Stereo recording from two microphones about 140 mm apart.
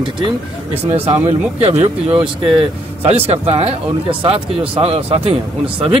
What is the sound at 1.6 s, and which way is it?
Speech, 50° right (ahead or behind).